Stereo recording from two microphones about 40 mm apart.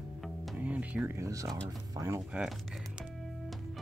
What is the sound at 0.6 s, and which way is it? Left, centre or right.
Speech, right.